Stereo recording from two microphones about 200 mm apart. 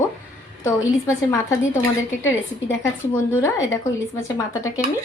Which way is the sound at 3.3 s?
15° left (ahead or behind).